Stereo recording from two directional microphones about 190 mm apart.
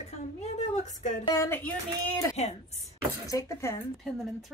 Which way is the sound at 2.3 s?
35° left (ahead or behind).